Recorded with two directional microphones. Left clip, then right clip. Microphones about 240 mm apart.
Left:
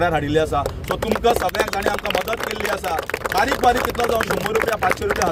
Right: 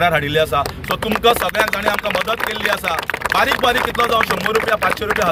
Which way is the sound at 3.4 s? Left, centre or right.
Centre.